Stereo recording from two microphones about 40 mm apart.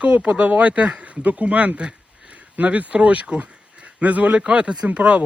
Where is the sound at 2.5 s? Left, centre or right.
Right.